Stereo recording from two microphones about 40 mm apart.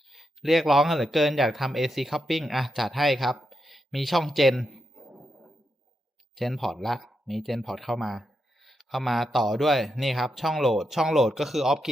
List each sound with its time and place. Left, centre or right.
0.1 s speech: centre
6.3 s speech: centre